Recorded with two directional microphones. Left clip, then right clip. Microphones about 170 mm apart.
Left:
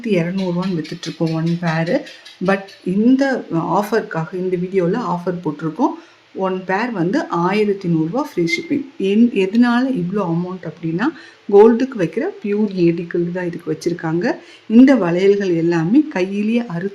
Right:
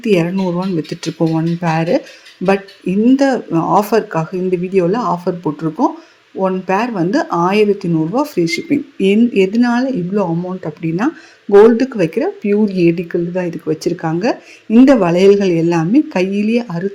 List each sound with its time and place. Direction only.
0.0 s speech: 20° right (ahead or behind)
1.2 s speech: 5° right (ahead or behind)